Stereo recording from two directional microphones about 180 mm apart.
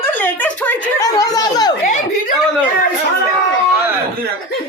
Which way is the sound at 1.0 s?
20° left (ahead or behind).